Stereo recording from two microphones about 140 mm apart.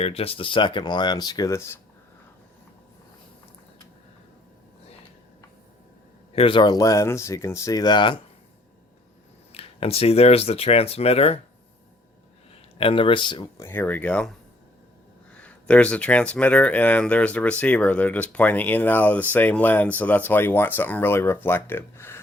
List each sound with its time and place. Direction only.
0.0 s speech: 45° left (ahead or behind); by 1.7 s 20° left (ahead or behind)
6.3 s speech: 40° left (ahead or behind)
9.5 s speech: 45° left (ahead or behind)
12.8 s speech: 40° left (ahead or behind)
13.6 s speech: 15° left (ahead or behind)
15.4 s speech: 10° left (ahead or behind)